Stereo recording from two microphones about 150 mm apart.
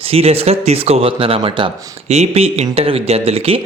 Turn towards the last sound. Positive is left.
turn(degrees=-40)  # may be behind; listen again after turning